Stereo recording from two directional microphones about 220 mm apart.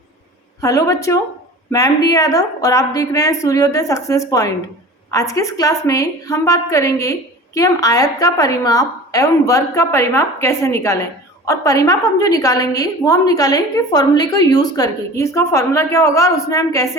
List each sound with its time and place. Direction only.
0.6 s a woman's voice: 15° left (ahead or behind)